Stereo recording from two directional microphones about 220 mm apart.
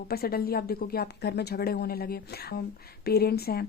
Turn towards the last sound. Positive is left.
turn(degrees=45)  # may be behind; listen again after turning